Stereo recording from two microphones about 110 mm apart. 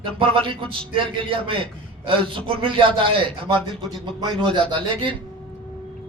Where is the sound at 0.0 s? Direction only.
50° right (ahead or behind).